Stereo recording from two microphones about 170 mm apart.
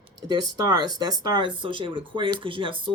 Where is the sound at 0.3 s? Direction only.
25° right (ahead or behind).